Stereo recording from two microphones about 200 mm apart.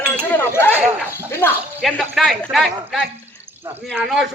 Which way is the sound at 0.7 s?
Centre (ahead or behind).